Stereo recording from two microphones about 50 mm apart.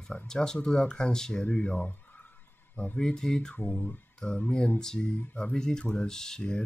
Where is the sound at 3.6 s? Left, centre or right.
Left.